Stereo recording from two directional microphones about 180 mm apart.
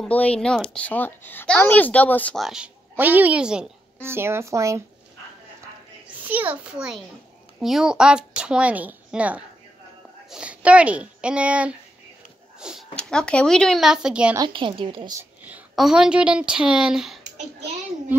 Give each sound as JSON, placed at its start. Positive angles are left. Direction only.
{"t": 0.0, "sound": "a child's voice", "side_deg": 5}
{"t": 6.0, "sound": "a child's voice", "side_deg": -10}
{"t": 12.5, "sound": "dog", "side_deg": -5}
{"t": 12.9, "sound": "a child's voice", "side_deg": 5}
{"t": 14.3, "sound": "a woman's voice", "side_deg": -25}
{"t": 15.1, "sound": "a woman's voice", "side_deg": -10}